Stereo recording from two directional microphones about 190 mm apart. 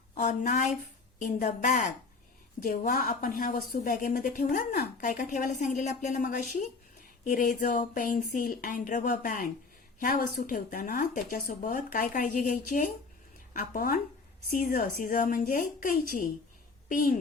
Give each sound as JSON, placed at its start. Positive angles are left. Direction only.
{"t": 0.1, "sound": "a woman's voice", "side_deg": 40}